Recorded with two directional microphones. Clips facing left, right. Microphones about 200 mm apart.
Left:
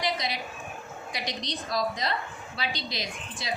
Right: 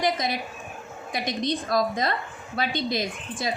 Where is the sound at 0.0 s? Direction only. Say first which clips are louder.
Right 5 dB; 50° right (ahead or behind).